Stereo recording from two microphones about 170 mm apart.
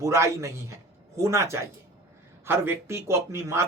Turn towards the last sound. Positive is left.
turn(degrees=-15)  # may be behind; listen again after turning